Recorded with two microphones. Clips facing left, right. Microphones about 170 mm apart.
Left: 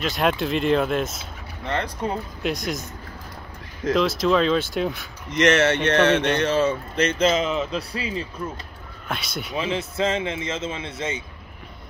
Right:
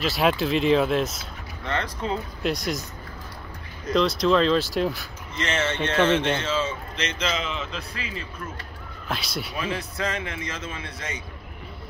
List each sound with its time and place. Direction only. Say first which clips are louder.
0.0 s speech: even; centre (ahead or behind)
1.7 s a man's voice: left 2 dB; 35° left (ahead or behind)
2.4 s speech: even; centre (ahead or behind)
3.9 s speech: even; centre (ahead or behind)
5.3 s speech: left 9 dB; 80° left; by 7.2 s 50° left (ahead or behind)
7.3 s a man's voice: left 7 dB; 40° left (ahead or behind)
9.0 s speech: even; centre (ahead or behind)
9.5 s speech: left 6 dB; 25° left (ahead or behind)